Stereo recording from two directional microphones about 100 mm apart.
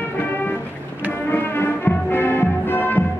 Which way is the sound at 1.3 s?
20° left (ahead or behind).